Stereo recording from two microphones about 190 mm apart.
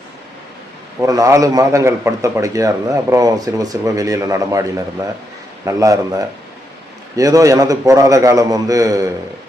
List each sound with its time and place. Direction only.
0.9 s a man's voice: 15° right (ahead or behind)
5.6 s a man's voice: 15° right (ahead or behind)